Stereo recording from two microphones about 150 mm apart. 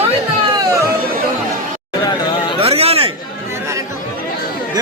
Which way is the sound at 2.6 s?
40° right (ahead or behind).